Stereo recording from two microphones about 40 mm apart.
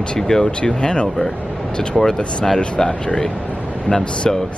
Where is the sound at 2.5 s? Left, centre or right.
Left.